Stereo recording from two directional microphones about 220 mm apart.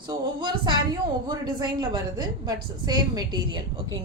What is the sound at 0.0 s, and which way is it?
A woman's voice, 20° right (ahead or behind).